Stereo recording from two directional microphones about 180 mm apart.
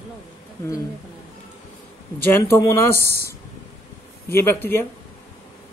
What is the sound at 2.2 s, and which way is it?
Speech, 15° left (ahead or behind).